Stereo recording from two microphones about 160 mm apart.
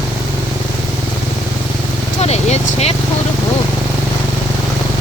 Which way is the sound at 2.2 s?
40° left (ahead or behind).